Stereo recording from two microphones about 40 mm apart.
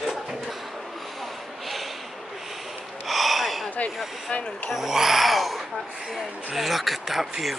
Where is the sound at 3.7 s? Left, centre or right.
Left.